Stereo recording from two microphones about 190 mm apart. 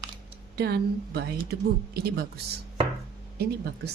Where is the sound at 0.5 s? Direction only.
60° right (ahead or behind).